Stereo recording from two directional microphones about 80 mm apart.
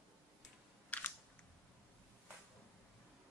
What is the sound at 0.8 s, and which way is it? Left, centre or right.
Camera, centre.